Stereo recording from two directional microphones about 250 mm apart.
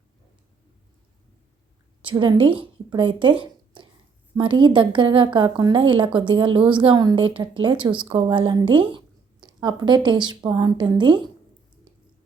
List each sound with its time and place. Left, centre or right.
2.0 s a woman's voice: centre
4.4 s a woman's voice: centre